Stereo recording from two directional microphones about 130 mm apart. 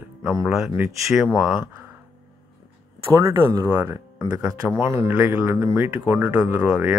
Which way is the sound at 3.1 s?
20° right (ahead or behind).